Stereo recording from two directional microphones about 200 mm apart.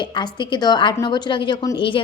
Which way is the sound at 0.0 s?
20° left (ahead or behind).